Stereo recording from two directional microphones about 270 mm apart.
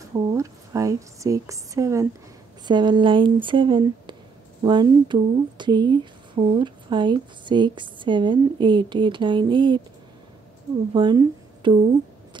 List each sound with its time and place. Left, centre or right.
0.0 s speech: centre
10.9 s speech: centre